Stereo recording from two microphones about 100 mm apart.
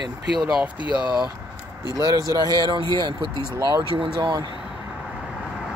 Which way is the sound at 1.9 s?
35° right (ahead or behind).